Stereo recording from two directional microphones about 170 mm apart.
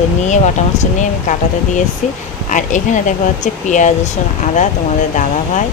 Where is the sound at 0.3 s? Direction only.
45° left (ahead or behind).